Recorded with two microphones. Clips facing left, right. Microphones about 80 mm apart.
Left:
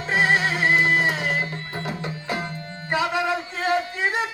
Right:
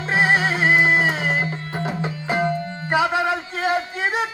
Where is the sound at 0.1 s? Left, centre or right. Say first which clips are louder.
Right 2 dB; centre.